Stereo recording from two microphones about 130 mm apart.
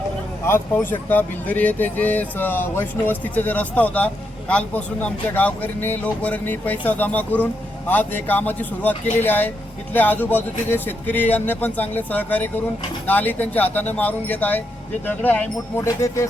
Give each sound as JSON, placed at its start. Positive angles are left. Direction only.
{"t": 0.4, "sound": "speech", "side_deg": 15}